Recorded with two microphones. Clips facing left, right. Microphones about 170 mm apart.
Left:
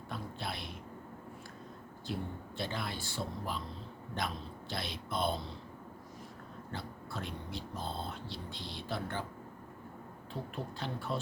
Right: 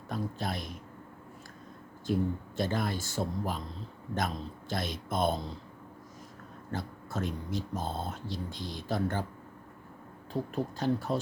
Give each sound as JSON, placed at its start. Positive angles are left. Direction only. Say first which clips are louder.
{"t": 0.1, "sound": "speech", "louder": "right 7 dB", "side_deg": -45}
{"t": 2.1, "sound": "speech", "louder": "right 9 dB", "side_deg": -45}
{"t": 6.7, "sound": "speech", "louder": "right 6 dB", "side_deg": -45}
{"t": 10.5, "sound": "speech", "louder": "right 11 dB", "side_deg": -40}